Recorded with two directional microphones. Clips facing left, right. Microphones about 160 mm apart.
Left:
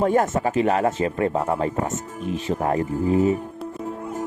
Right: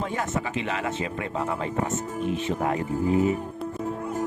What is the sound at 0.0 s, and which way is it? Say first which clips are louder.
Speech: left 9 dB; 45° left (ahead or behind).